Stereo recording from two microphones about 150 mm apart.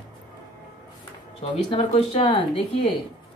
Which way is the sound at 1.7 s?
35° left (ahead or behind).